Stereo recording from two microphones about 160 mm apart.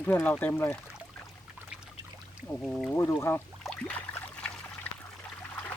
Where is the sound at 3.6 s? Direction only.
5° left (ahead or behind).